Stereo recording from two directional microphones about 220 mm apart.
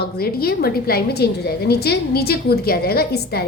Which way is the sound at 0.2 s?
45° left (ahead or behind).